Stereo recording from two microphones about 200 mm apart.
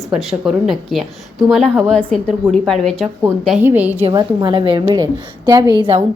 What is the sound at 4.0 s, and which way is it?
A woman's voice, 20° right (ahead or behind).